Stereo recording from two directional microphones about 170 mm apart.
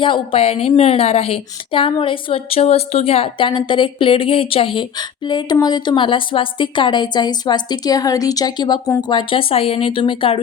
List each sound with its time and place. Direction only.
0.0 s a woman's voice: 30° left (ahead or behind)